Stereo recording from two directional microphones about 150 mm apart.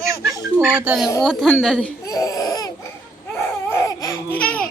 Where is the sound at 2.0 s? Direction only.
20° left (ahead or behind).